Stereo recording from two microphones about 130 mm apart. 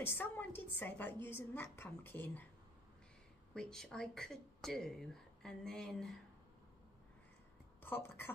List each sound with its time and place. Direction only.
0.0 s a woman's voice: 15° left (ahead or behind)
3.5 s speech: 5° left (ahead or behind)
7.8 s a woman's voice: 15° left (ahead or behind)